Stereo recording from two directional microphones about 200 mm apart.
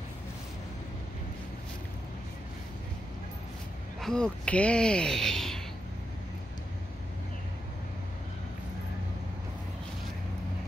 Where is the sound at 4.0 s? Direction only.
5° left (ahead or behind).